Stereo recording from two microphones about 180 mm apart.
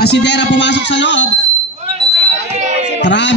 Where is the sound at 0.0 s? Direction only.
70° left (ahead or behind); by 1.2 s 85° left.